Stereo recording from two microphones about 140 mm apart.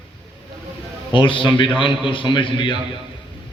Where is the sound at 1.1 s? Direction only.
35° left (ahead or behind).